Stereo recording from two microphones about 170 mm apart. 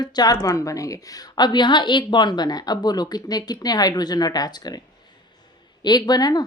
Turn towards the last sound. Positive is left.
turn(degrees=25)  # may be behind; listen again after turning